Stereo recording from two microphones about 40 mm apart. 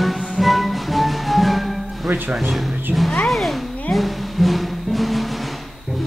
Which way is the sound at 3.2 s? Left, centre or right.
Centre.